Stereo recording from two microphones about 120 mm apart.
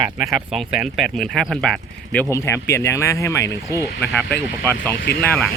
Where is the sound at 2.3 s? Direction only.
25° left (ahead or behind).